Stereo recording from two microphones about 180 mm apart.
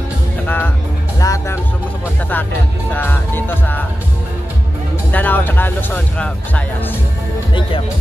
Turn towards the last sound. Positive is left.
turn(degrees=10)  # may be behind; listen again after turning